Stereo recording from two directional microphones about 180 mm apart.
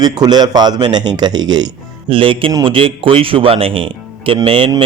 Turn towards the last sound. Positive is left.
turn(degrees=-30)  # may be behind; listen again after turning